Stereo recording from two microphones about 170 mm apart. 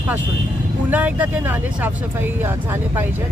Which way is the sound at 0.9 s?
10° right (ahead or behind).